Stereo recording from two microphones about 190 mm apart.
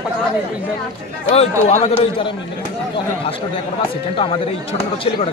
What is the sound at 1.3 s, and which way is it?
A man's voice, 35° left (ahead or behind).